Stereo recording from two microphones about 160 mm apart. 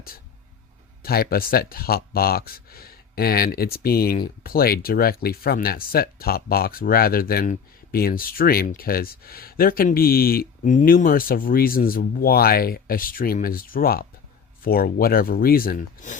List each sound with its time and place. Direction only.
1.0 s speech: 70° left (ahead or behind)